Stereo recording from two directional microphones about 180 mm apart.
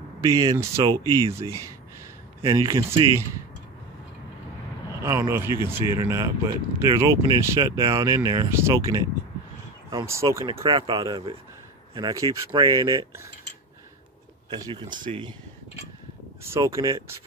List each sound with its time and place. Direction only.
0.2 s speech: 20° right (ahead or behind)
5.0 s speech: 15° right (ahead or behind)
14.5 s speech: 25° right (ahead or behind)
16.4 s speech: 15° right (ahead or behind)